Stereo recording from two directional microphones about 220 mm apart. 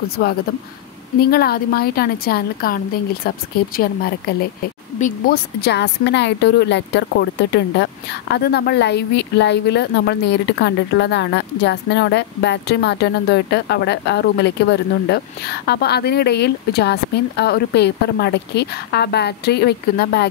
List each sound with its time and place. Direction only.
0.2 s speech: 45° left (ahead or behind)